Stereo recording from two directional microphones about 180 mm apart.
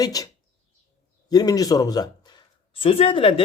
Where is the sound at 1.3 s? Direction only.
20° left (ahead or behind).